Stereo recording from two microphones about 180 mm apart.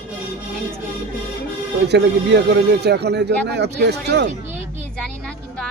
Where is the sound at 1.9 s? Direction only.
70° right (ahead or behind).